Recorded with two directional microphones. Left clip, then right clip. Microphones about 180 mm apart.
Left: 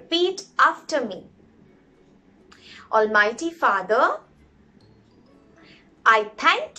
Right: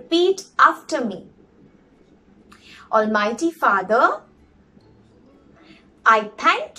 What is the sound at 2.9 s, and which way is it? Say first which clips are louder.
A woman's voice: even; centre (ahead or behind).